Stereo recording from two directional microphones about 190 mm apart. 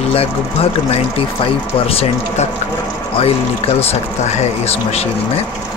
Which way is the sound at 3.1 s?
30° left (ahead or behind).